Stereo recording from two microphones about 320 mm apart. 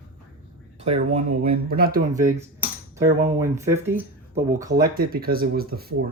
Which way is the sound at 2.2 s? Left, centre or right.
Centre.